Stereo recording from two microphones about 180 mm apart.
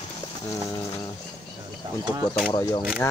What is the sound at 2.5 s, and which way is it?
Speech, 20° left (ahead or behind).